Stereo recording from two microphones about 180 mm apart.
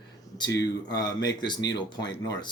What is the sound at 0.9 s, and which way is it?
Speech, 20° left (ahead or behind).